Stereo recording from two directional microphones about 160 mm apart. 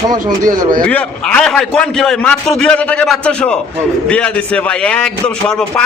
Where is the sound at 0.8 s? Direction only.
10° left (ahead or behind).